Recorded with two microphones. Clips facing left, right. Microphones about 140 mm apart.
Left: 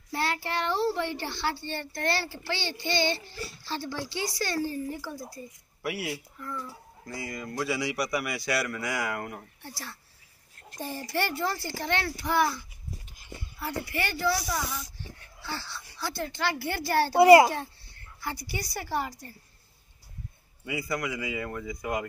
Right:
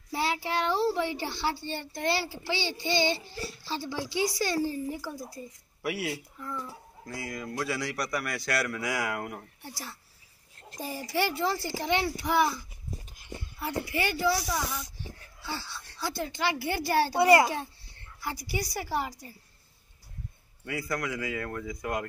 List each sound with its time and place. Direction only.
0.1 s a child's voice: 10° right (ahead or behind)
4.6 s speech: 25° right (ahead or behind)
4.9 s a man's voice: 5° right (ahead or behind)
6.4 s a child's voice: 20° right (ahead or behind)
7.1 s a man's voice: centre (ahead or behind)
10.8 s a child's voice: 5° right (ahead or behind)
12.9 s a sound: 20° right (ahead or behind)
14.4 s a man's voice: centre (ahead or behind)
15.0 s dog: 15° right (ahead or behind)
16.0 s a child's voice: 15° right (ahead or behind)
17.2 s a child's voice: 25° left (ahead or behind)
18.2 s a man's voice: 10° right (ahead or behind)
20.6 s a man's voice: 5° left (ahead or behind)